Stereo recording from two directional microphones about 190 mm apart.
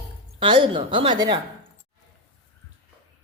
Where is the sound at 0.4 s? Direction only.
25° right (ahead or behind).